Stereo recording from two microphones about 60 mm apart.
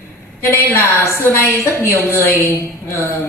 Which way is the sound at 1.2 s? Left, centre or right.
Left.